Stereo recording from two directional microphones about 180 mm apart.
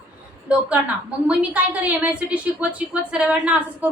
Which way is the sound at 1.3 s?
10° right (ahead or behind).